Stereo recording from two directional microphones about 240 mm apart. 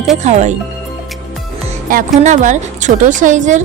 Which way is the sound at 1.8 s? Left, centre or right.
Right.